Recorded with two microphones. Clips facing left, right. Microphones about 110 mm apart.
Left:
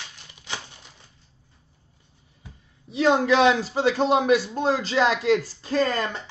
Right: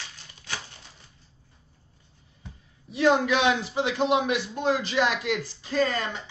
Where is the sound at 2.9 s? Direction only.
25° left (ahead or behind).